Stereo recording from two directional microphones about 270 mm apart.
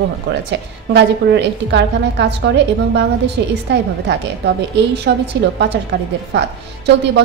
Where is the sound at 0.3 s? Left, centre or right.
Right.